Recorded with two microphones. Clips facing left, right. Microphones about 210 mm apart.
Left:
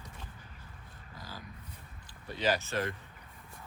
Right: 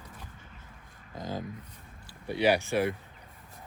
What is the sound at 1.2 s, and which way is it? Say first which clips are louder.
Speech: right 12 dB; 20° right (ahead or behind).